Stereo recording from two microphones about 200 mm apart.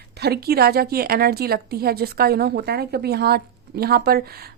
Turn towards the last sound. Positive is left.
turn(degrees=-50)  # may be behind; listen again after turning